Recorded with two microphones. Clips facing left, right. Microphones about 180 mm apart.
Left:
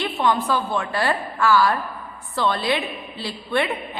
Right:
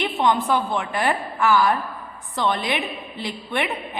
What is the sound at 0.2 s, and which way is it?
A woman's voice, 20° right (ahead or behind).